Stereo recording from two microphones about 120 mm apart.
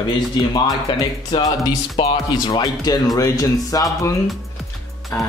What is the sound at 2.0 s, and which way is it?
Speech, 40° left (ahead or behind).